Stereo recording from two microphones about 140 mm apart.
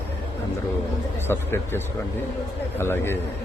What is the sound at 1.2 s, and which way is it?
A man's voice, 15° left (ahead or behind).